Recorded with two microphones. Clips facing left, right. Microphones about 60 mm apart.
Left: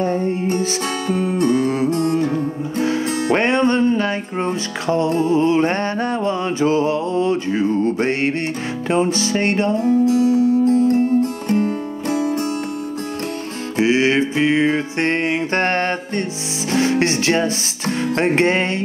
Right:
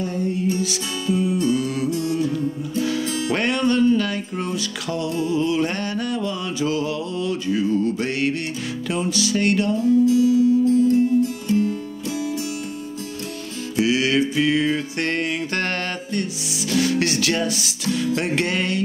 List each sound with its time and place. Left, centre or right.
0.0 s music: left
2.8 s music: left
13.7 s music: left